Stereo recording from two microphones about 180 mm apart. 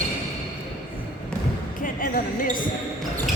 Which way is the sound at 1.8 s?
50° left (ahead or behind).